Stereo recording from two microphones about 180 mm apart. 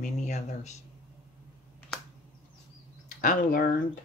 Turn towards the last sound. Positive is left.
turn(degrees=45)  # may be behind; listen again after turning